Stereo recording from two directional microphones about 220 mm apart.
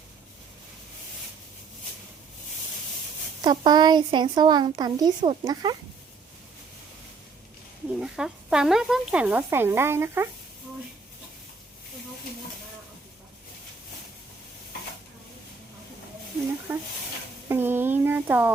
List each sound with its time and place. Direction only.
3.4 s speech: 20° right (ahead or behind)
7.9 s speech: 5° right (ahead or behind)
16.7 s speech: 10° right (ahead or behind)